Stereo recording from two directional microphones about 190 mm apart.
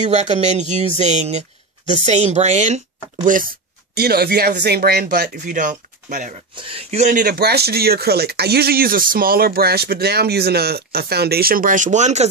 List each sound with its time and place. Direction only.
0.0 s speech: 35° right (ahead or behind)
6.5 s speech: 30° right (ahead or behind)